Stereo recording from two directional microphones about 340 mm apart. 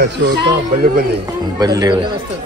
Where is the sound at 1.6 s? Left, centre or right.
Centre.